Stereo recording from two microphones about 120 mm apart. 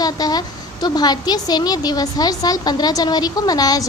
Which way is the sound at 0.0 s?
35° left (ahead or behind).